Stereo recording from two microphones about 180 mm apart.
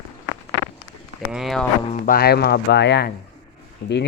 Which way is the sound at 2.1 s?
65° left (ahead or behind).